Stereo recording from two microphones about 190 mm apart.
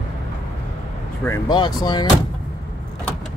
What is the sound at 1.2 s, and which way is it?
Speech, 20° left (ahead or behind).